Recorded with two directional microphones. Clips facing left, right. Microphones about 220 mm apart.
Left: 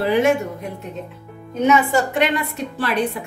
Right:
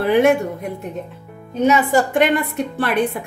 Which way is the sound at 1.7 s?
55° right (ahead or behind).